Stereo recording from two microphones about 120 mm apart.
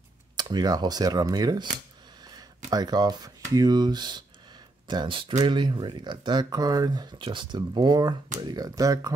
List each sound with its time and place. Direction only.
0.4 s speech: 35° right (ahead or behind)
2.7 s speech: 35° right (ahead or behind)